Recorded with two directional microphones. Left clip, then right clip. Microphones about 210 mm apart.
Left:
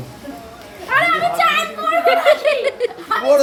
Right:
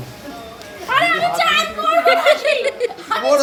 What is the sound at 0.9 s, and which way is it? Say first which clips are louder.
Speech: even; 10° right (ahead or behind).